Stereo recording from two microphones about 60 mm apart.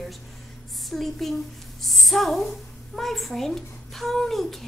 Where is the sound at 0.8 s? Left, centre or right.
Centre.